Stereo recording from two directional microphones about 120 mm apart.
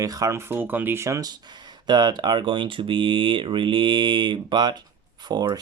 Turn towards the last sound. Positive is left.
turn(degrees=-35)  # may be behind; listen again after turning